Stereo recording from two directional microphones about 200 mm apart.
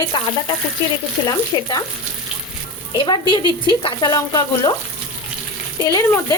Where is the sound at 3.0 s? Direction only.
25° left (ahead or behind).